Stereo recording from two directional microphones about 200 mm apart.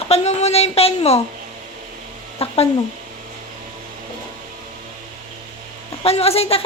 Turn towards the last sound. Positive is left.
turn(degrees=30)  # may be behind; listen again after turning